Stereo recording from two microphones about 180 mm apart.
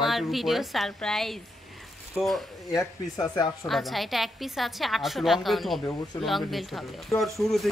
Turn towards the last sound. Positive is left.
turn(degrees=0)  # may be behind; listen again after turning